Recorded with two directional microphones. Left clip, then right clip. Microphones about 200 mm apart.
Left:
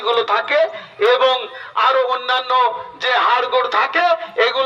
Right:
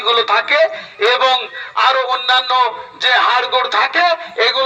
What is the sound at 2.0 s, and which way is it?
Speech, 55° left (ahead or behind).